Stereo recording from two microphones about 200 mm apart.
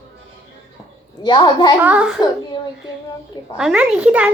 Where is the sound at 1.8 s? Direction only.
5° right (ahead or behind).